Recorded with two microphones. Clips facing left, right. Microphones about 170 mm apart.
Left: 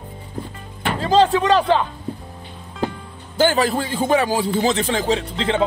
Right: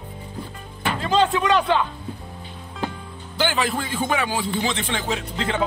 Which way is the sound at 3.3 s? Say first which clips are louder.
Left 6 dB; 45° left (ahead or behind).